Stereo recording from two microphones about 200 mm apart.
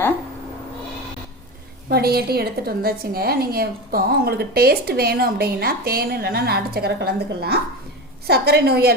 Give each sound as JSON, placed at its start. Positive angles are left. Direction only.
{"t": 1.9, "sound": "a woman's voice", "side_deg": -50}